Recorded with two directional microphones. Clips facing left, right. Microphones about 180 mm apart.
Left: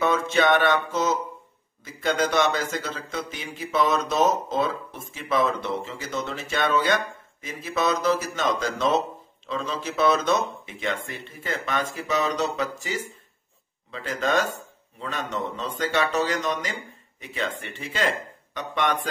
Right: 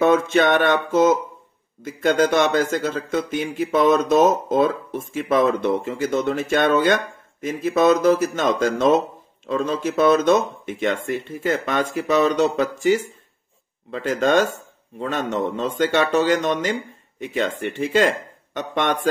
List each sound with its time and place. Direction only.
0.0 s speech: 50° right (ahead or behind)